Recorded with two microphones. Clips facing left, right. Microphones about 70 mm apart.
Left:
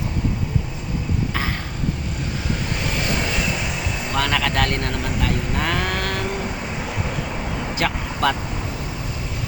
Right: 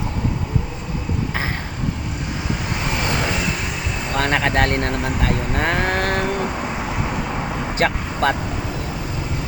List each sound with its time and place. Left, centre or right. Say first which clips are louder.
4.2 s speech: right 3 dB; right
7.8 s speech: right 3 dB; right